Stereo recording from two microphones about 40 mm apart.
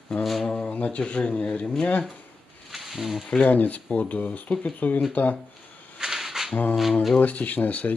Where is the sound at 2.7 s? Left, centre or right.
Centre.